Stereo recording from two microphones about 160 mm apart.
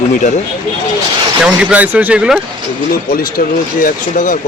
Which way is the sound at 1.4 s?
10° right (ahead or behind).